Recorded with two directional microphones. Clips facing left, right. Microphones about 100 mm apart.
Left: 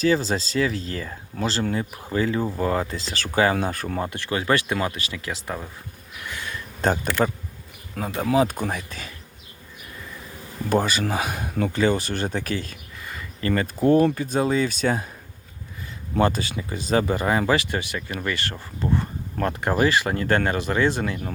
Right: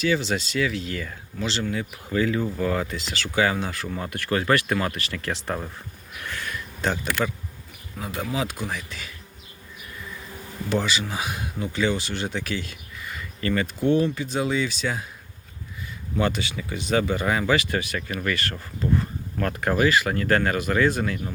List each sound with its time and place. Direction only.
0.0 s speech: 35° left (ahead or behind)
4.0 s speech: 25° left (ahead or behind)
5.1 s speech: 10° left (ahead or behind)
6.3 s a sound: 20° left (ahead or behind)
6.8 s speech: 40° left (ahead or behind)
8.0 s speech: 30° left (ahead or behind)
10.7 s speech: 45° left (ahead or behind)
16.2 s speech: 35° left (ahead or behind)